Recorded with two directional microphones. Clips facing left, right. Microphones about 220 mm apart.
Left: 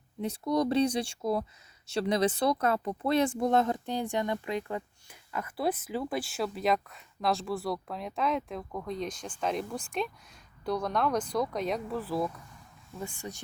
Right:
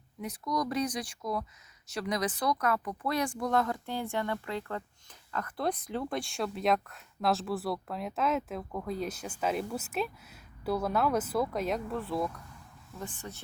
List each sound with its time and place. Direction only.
0.2 s speech: 30° left (ahead or behind); by 13.4 s 10° left (ahead or behind)